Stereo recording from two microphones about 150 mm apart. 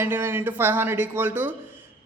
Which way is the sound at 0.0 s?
15° right (ahead or behind).